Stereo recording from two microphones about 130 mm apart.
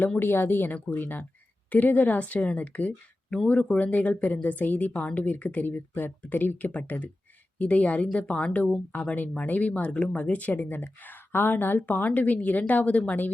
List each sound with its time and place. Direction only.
0.0 s a woman's voice: 15° left (ahead or behind)